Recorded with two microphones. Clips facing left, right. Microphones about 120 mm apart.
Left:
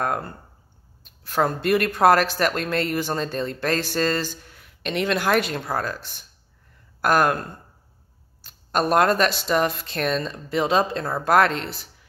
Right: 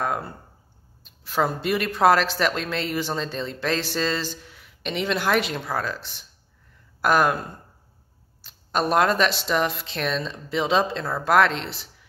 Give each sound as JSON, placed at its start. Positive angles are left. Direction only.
{"t": 0.1, "sound": "speech", "side_deg": -5}
{"t": 2.1, "sound": "speech", "side_deg": 50}
{"t": 4.3, "sound": "a woman's voice", "side_deg": 0}
{"t": 5.8, "sound": "speech", "side_deg": 45}
{"t": 7.0, "sound": "speech", "side_deg": 0}